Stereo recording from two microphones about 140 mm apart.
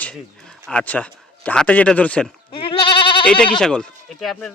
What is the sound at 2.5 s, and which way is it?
Goat, 40° left (ahead or behind).